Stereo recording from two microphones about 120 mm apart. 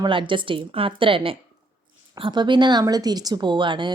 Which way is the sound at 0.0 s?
45° right (ahead or behind).